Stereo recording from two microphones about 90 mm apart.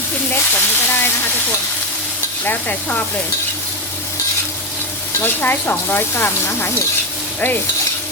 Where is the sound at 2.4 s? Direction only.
20° left (ahead or behind).